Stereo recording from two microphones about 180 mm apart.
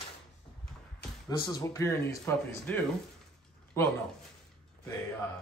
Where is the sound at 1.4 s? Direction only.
20° left (ahead or behind).